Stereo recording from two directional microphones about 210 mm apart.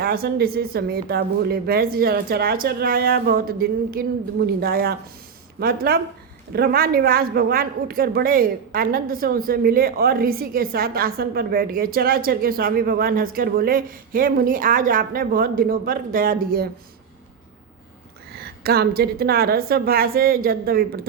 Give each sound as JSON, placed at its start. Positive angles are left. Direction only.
{"t": 0.0, "sound": "a man's voice", "side_deg": -45}
{"t": 18.3, "sound": "a man's voice", "side_deg": -50}